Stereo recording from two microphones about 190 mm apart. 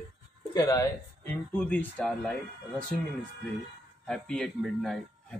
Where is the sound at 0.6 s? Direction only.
15° left (ahead or behind).